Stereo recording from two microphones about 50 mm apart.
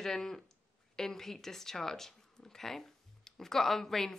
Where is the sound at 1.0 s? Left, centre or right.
Centre.